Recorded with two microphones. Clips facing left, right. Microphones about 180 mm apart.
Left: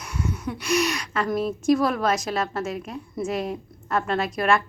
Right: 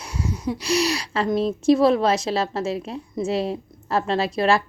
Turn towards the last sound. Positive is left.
turn(degrees=-30)  # may be behind; listen again after turning